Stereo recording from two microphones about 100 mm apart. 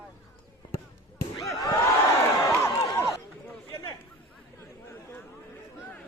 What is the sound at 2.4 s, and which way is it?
Crowd, 30° left (ahead or behind).